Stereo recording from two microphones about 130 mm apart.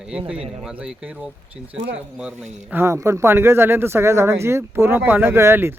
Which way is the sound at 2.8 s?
20° right (ahead or behind).